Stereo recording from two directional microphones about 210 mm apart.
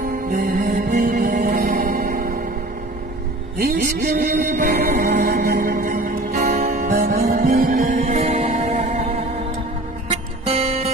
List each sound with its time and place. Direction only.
0.0 s music: 40° right (ahead or behind)
4.2 s music: 45° right (ahead or behind)
6.6 s music: 30° right (ahead or behind)
6.9 s music: 45° right (ahead or behind); by 9.3 s 30° right (ahead or behind)
10.4 s music: 30° right (ahead or behind)